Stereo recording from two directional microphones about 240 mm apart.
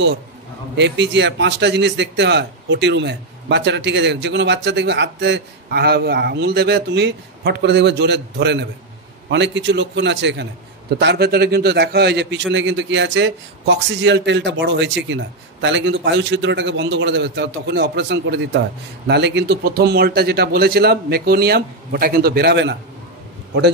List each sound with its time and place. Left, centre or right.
0.7 s a man's voice: right